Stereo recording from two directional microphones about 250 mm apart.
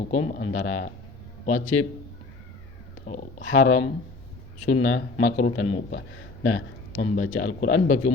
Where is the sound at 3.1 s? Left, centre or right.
Left.